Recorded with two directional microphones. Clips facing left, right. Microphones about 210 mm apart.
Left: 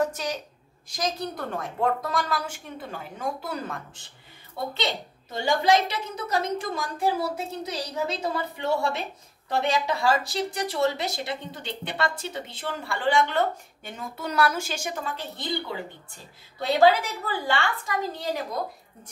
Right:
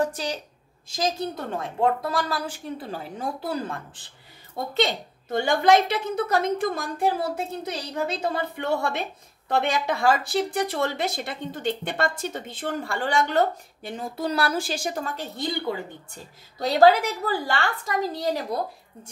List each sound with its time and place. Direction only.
0.0 s a woman's voice: 30° right (ahead or behind)
5.3 s a woman's voice: 55° right (ahead or behind)
16.5 s a woman's voice: 40° right (ahead or behind)